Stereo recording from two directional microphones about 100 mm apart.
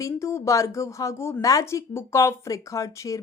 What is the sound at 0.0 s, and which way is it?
Speech, 30° left (ahead or behind).